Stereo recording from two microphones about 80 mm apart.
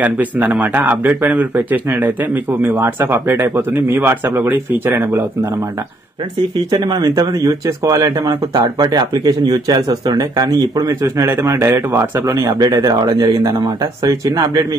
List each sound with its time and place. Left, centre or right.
0.0 s speech: right
6.7 s speech: right
12.4 s speech: right